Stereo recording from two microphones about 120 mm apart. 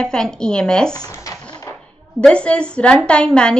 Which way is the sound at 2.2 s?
10° left (ahead or behind).